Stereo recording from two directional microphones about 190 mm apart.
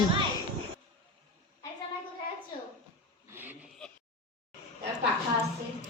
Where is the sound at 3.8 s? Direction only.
5° left (ahead or behind).